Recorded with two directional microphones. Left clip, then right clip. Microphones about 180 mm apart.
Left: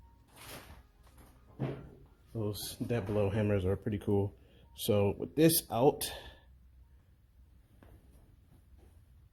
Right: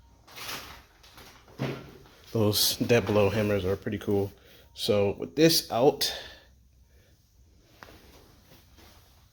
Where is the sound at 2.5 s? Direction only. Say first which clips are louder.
Right 15 dB; 25° right (ahead or behind).